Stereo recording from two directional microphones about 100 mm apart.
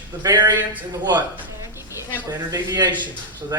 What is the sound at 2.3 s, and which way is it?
Speech, 40° right (ahead or behind).